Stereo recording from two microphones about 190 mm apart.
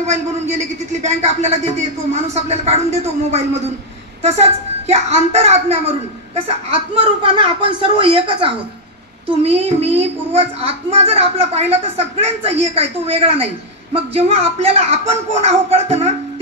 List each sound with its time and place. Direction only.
0.0 s a woman's voice: 35° right (ahead or behind)